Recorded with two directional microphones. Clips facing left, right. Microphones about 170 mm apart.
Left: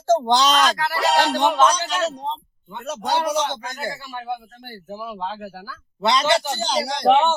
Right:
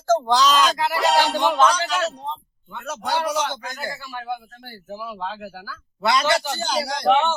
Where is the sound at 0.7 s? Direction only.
15° right (ahead or behind).